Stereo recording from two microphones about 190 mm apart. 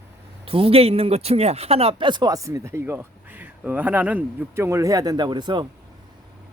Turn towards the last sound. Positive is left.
turn(degrees=-25)  # may be behind; listen again after turning